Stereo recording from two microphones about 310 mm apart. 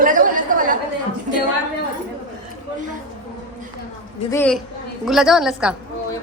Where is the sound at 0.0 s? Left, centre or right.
Right.